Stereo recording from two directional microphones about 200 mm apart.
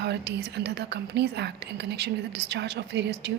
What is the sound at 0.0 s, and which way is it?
Speech, 55° right (ahead or behind).